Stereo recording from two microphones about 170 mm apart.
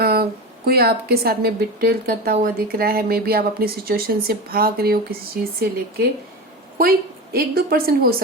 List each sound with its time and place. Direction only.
0.0 s speech: 65° right (ahead or behind)
7.3 s speech: 65° right (ahead or behind)